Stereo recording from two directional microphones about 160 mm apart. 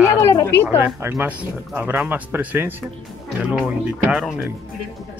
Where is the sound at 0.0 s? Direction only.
20° left (ahead or behind).